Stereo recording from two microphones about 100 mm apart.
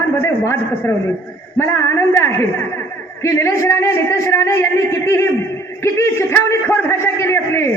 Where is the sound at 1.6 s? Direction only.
25° left (ahead or behind).